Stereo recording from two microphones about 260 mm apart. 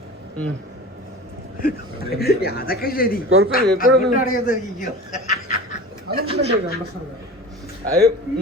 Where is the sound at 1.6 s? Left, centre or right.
Left.